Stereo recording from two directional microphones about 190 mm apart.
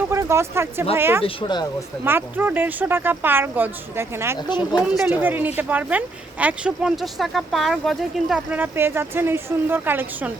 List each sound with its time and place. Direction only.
0.1 s speech: 15° right (ahead or behind)
1.2 s speech: 25° left (ahead or behind)
2.0 s speech: 10° right (ahead or behind)
4.4 s speech: 25° left (ahead or behind)
4.9 s speech: 5° right (ahead or behind)